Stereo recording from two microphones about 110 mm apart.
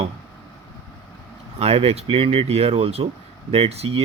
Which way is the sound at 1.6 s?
60° right (ahead or behind).